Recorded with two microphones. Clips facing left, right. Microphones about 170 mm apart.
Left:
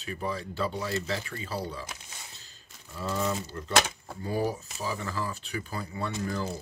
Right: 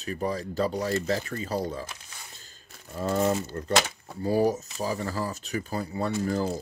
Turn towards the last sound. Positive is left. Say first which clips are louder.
# right 5 dB
turn(degrees=-40)  # may be behind; listen again after turning